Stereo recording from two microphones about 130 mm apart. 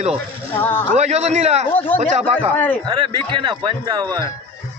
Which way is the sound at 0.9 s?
60° right (ahead or behind).